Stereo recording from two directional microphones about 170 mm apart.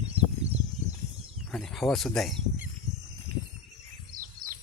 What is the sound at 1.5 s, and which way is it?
Speech, 5° left (ahead or behind).